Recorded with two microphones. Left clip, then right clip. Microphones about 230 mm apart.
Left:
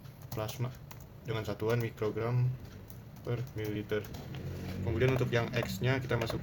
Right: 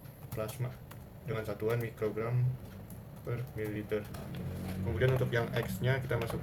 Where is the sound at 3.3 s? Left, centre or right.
Left.